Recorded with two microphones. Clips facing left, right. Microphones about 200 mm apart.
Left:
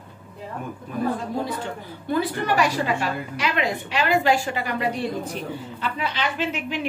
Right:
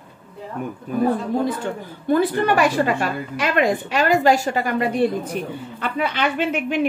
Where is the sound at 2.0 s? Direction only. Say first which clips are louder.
Right 6 dB; 55° right (ahead or behind).